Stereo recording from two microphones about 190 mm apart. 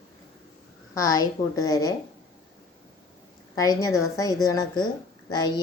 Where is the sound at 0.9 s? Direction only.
20° left (ahead or behind).